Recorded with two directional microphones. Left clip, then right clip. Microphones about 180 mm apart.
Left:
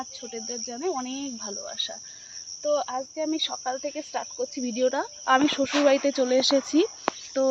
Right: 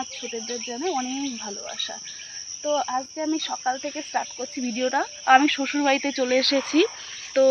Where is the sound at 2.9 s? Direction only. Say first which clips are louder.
Right 2 dB; 25° left (ahead or behind).